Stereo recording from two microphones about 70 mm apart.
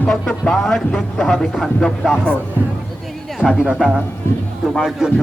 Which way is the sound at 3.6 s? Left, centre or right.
Centre.